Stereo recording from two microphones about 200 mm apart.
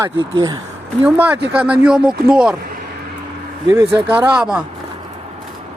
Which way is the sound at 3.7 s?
15° right (ahead or behind).